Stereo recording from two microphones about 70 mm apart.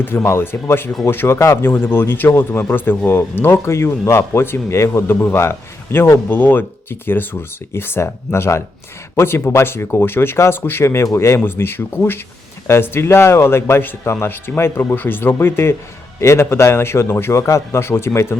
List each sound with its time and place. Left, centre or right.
0.0 s speech: left